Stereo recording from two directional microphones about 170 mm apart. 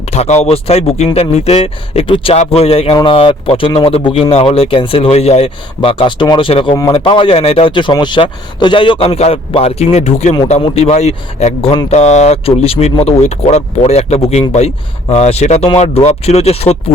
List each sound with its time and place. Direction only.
0.1 s speech: 40° left (ahead or behind)